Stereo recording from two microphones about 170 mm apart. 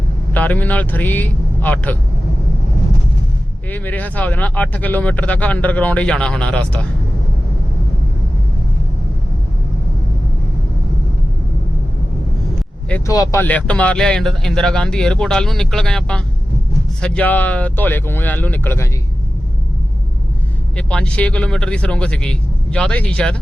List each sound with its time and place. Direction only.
0.3 s speech: 10° left (ahead or behind)
3.7 s speech: 10° left (ahead or behind)
12.9 s speech: 10° left (ahead or behind)
20.7 s speech: 5° left (ahead or behind)